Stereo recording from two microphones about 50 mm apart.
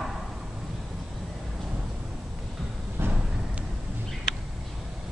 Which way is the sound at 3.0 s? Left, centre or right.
Right.